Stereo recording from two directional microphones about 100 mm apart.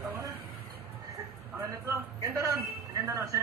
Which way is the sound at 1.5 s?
30° right (ahead or behind).